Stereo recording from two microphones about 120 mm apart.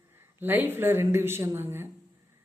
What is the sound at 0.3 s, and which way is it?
Speech, 15° right (ahead or behind).